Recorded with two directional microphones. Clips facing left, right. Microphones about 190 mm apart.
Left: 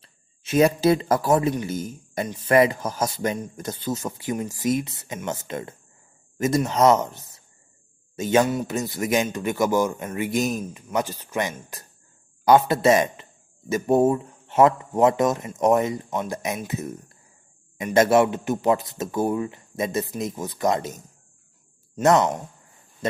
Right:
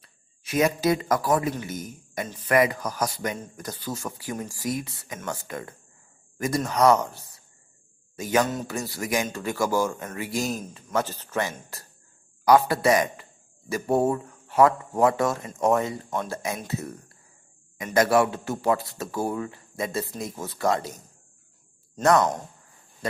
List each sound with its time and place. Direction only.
0.0 s speech: 25° left (ahead or behind)
22.0 s speech: 20° left (ahead or behind)